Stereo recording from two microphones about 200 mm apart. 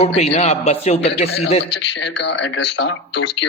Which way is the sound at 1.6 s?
60° left (ahead or behind).